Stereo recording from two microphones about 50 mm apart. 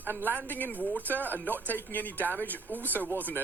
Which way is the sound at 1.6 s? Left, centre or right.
Left.